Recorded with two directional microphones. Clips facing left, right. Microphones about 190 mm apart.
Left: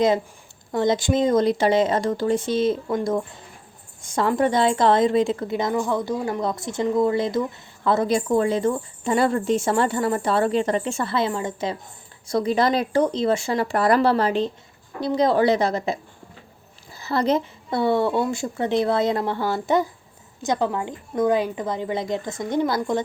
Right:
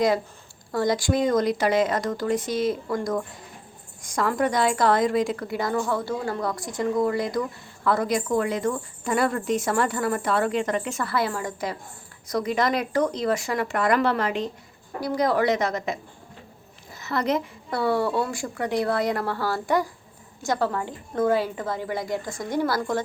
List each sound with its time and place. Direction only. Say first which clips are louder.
0.7 s speech: left 2 dB; 20° left (ahead or behind)